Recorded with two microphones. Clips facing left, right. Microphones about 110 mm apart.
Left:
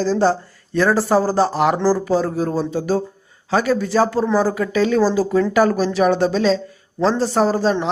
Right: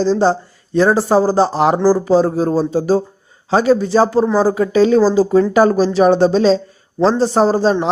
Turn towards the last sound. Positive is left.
turn(degrees=-30)  # may be behind; listen again after turning